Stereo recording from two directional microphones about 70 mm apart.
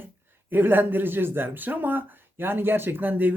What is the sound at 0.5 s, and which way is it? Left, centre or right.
Speech, right.